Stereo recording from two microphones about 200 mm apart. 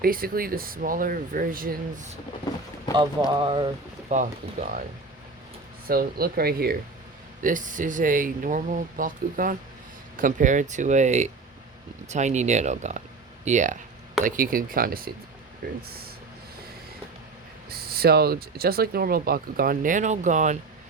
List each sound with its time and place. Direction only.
0.0 s speech: 45° right (ahead or behind)
3.2 s speech: 25° right (ahead or behind)
4.1 s speech: 35° right (ahead or behind)
5.9 s speech: 50° right (ahead or behind)
17.7 s speech: 50° right (ahead or behind)